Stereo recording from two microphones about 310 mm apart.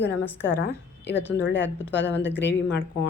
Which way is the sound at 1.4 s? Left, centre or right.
Left.